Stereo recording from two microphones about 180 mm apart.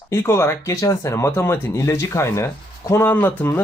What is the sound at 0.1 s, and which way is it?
Speech, 15° left (ahead or behind).